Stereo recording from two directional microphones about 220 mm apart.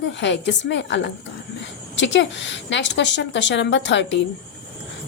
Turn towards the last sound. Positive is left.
turn(degrees=55)  # may be behind; listen again after turning